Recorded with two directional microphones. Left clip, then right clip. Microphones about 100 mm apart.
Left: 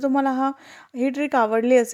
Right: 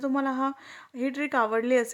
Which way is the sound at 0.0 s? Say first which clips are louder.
Left 6 dB; 35° left (ahead or behind).